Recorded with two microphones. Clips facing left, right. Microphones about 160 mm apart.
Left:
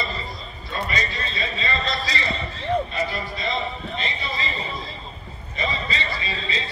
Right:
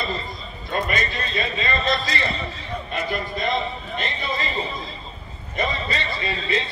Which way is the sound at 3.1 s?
50° right (ahead or behind).